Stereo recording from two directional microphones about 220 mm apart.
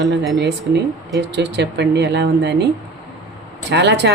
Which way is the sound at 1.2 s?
50° right (ahead or behind).